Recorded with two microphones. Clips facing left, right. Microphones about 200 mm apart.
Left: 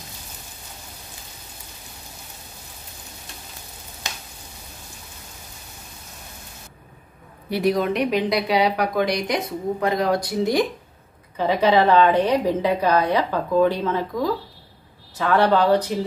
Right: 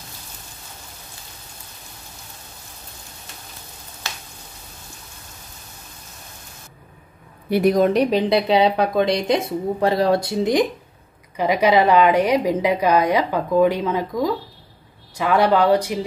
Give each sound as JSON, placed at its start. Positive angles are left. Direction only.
{"t": 4.0, "sound": "frying", "side_deg": 15}
{"t": 7.4, "sound": "a woman's voice", "side_deg": -50}